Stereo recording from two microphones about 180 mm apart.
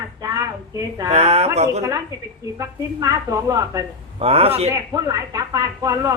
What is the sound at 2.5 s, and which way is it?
Speech, 20° right (ahead or behind).